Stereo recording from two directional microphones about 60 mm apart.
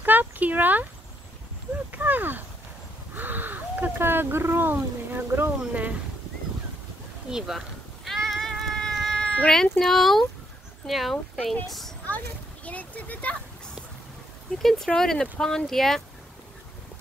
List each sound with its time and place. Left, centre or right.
0.0 s speech: right
1.9 s speech: right
5.6 s speech: right
7.2 s cat: centre
9.8 s speech: centre
12.6 s speech: left
14.6 s speech: centre